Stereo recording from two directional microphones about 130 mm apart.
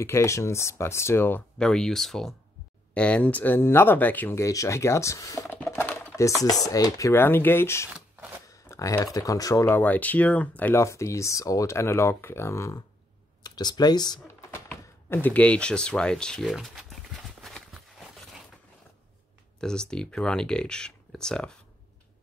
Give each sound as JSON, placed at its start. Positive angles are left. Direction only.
{"t": 0.0, "sound": "speech", "side_deg": 20}
{"t": 1.6, "sound": "speech", "side_deg": 5}
{"t": 5.6, "sound": "typing", "side_deg": 15}
{"t": 6.4, "sound": "speech", "side_deg": 30}
{"t": 14.2, "sound": "a sound", "side_deg": 20}
{"t": 19.6, "sound": "speech", "side_deg": 5}